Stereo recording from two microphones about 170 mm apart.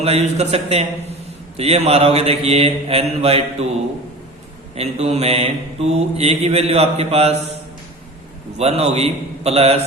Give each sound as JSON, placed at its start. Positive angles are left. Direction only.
{"t": 0.0, "sound": "mantra", "side_deg": -35}
{"t": 4.7, "sound": "mantra", "side_deg": -40}
{"t": 8.5, "sound": "mantra", "side_deg": -40}